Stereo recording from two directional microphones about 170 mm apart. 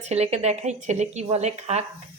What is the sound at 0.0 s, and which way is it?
Speech, 40° right (ahead or behind).